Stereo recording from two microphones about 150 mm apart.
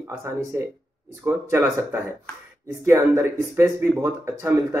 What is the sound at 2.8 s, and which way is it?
Speech, 20° right (ahead or behind).